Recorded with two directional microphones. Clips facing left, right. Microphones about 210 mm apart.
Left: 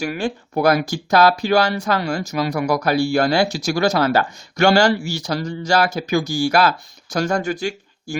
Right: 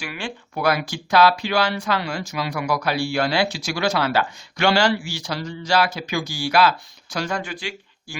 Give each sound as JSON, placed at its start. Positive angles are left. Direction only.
{"t": 0.0, "sound": "speech", "side_deg": 40}